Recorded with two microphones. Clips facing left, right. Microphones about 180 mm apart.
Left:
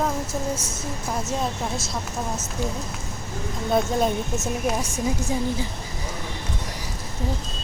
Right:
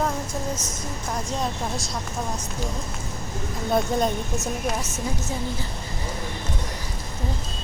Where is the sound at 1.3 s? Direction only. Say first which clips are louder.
Even; centre (ahead or behind).